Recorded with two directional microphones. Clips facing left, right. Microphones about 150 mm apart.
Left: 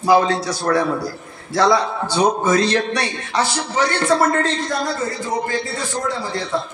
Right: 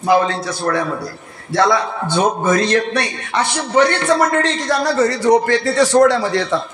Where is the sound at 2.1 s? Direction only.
55° right (ahead or behind).